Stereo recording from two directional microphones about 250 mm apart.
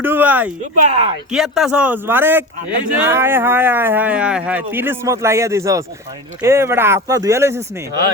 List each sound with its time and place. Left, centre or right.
0.0 s speech: centre
0.9 s speech: right
1.3 s speech: centre